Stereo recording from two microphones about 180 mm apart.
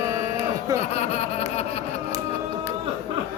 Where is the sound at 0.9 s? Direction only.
35° left (ahead or behind).